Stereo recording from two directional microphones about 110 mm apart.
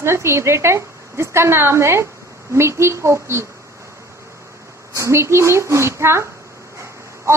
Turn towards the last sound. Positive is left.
turn(degrees=-25)  # may be behind; listen again after turning